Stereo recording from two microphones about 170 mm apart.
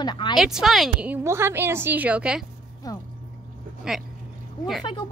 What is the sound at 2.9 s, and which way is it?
Speech, 20° left (ahead or behind).